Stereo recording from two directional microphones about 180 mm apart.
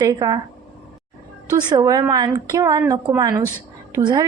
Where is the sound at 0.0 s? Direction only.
20° right (ahead or behind).